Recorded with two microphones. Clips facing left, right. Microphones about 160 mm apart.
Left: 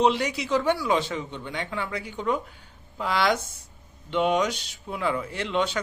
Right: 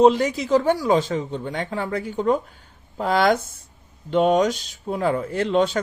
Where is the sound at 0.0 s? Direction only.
45° right (ahead or behind).